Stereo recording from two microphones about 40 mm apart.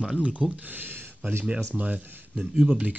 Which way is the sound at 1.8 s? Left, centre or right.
Right.